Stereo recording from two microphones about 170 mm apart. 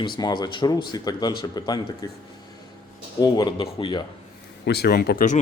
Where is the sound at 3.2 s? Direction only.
25° left (ahead or behind).